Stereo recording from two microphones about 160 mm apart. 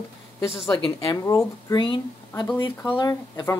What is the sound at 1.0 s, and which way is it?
Speech, 20° left (ahead or behind).